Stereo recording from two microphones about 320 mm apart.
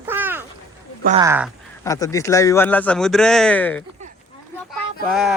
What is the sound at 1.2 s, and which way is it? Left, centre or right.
Speech, centre.